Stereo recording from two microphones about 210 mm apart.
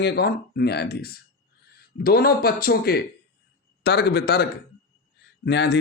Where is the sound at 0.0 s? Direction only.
50° left (ahead or behind).